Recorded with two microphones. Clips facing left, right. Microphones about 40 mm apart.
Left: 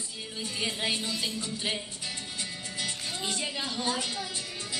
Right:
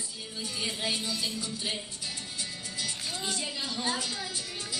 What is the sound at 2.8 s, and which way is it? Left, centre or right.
Music, left.